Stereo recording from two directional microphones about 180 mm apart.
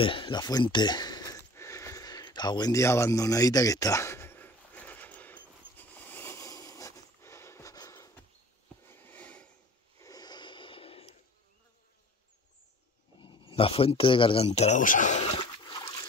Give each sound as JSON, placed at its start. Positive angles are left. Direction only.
{"t": 0.0, "sound": "a sound", "side_deg": 30}
{"t": 9.9, "sound": "snort", "side_deg": 20}
{"t": 13.2, "sound": "speech", "side_deg": 30}